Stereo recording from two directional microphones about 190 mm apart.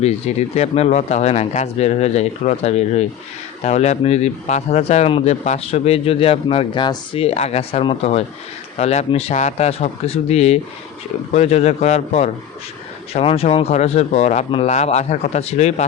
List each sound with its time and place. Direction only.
0.0 s speech: 35° left (ahead or behind)